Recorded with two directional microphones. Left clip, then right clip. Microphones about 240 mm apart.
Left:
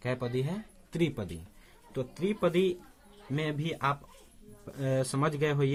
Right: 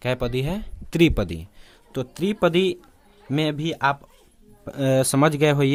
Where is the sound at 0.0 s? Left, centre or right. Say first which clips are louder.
Right 8 dB; right.